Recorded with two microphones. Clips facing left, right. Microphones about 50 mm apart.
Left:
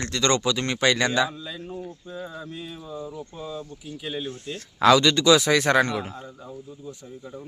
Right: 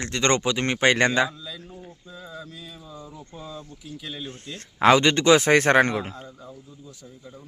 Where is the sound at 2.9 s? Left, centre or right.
Centre.